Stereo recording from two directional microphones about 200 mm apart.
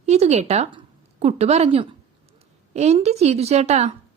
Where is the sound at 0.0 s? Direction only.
35° right (ahead or behind).